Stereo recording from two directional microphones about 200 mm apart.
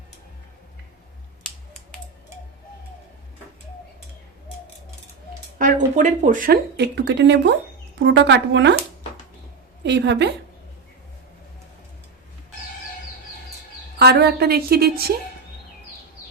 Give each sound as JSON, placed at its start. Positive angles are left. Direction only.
{"t": 5.5, "sound": "a woman's voice", "side_deg": -40}
{"t": 9.8, "sound": "a woman's voice", "side_deg": -60}
{"t": 14.0, "sound": "a woman's voice", "side_deg": -55}